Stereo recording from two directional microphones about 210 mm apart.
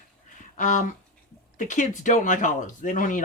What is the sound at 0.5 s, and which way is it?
Speech, 35° left (ahead or behind).